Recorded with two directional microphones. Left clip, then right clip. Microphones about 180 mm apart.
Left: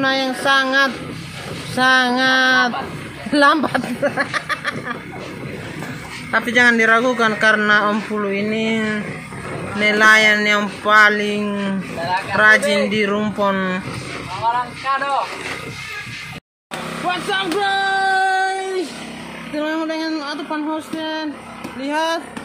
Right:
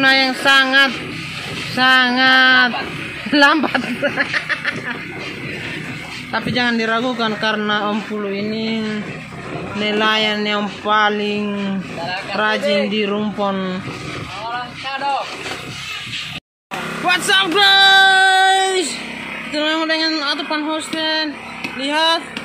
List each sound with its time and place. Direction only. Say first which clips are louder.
0.0 s speech: right 5 dB; 5° right (ahead or behind)
6.3 s a man's voice: left 5 dB; 5° right (ahead or behind)
9.8 s a man's voice: left 5 dB; 10° right (ahead or behind)
17.1 s a sound: right 6 dB; 5° right (ahead or behind)
19.5 s speech: right 4 dB; 5° left (ahead or behind)